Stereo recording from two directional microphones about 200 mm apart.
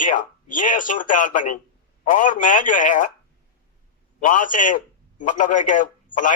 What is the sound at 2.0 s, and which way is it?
A man's voice, 40° left (ahead or behind).